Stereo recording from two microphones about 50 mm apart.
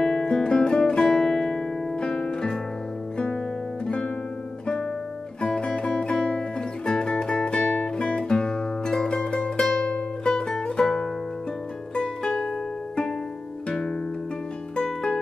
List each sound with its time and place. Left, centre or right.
0.0 s music: centre
3.8 s guitar: left
5.4 s music: centre
13.7 s music: centre